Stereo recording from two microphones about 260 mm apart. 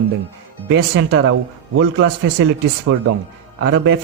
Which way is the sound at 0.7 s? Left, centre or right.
Right.